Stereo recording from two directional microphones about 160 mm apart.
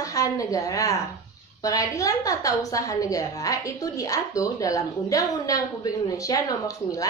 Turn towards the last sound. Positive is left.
turn(degrees=20)  # may be behind; listen again after turning